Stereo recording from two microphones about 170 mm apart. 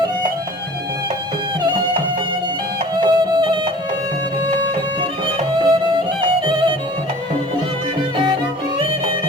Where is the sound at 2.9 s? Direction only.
30° right (ahead or behind).